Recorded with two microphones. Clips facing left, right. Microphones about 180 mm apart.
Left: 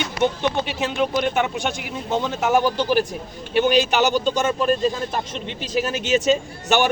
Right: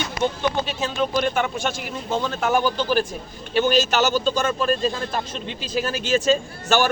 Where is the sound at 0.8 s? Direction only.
20° left (ahead or behind).